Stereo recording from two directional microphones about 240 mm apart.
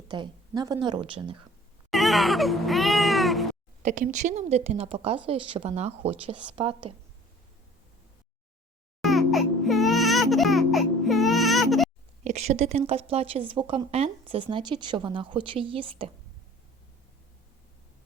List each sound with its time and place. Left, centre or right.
0.1 s speech: centre
1.9 s baby cry: centre
3.8 s speech: right
9.0 s music: centre
12.2 s speech: right